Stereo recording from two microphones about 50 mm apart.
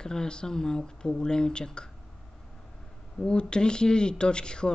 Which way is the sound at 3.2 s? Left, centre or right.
Centre.